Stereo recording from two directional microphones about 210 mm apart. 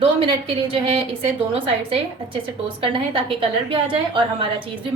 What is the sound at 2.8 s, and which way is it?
A woman's voice, 25° right (ahead or behind).